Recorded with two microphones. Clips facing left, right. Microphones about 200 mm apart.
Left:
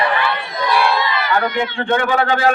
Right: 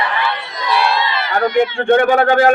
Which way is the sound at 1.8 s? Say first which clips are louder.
Right 4 dB; 50° right (ahead or behind).